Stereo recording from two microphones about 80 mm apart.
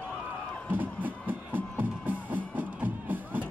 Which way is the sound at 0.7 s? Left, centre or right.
Right.